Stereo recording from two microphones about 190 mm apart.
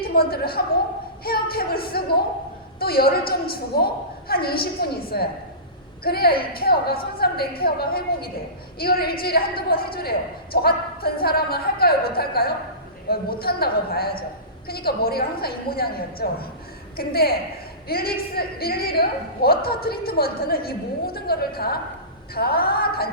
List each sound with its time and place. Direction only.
0.0 s a woman's voice: 55° left (ahead or behind)